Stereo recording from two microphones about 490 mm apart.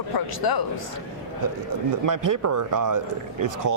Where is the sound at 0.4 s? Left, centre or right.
Left.